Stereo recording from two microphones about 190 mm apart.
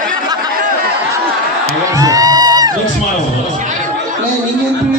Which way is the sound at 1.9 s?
20° right (ahead or behind).